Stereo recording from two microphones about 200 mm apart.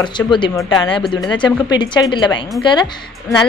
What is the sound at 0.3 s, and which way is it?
A woman's voice, 25° left (ahead or behind).